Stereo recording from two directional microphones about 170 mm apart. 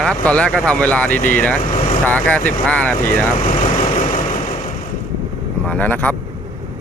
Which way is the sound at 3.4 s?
45° left (ahead or behind).